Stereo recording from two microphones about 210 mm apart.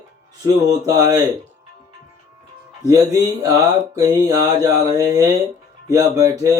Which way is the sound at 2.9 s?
15° right (ahead or behind).